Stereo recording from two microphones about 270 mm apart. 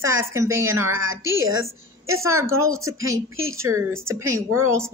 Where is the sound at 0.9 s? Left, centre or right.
Right.